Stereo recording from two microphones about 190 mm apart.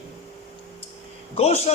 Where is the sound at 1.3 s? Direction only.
35° left (ahead or behind).